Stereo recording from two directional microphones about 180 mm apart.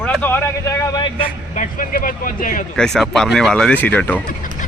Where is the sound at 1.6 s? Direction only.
50° left (ahead or behind).